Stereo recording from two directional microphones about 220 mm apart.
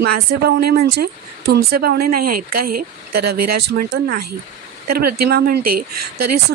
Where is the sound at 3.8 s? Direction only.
50° right (ahead or behind).